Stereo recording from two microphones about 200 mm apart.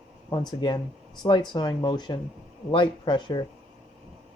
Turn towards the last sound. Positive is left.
turn(degrees=20)  # may be behind; listen again after turning